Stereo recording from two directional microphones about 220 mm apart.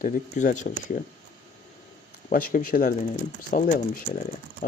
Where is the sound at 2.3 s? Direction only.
40° left (ahead or behind).